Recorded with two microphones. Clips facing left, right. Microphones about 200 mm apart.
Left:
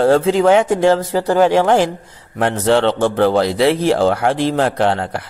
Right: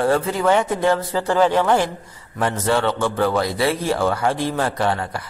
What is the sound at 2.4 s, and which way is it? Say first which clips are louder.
Speech: left 5 dB; 70° left (ahead or behind).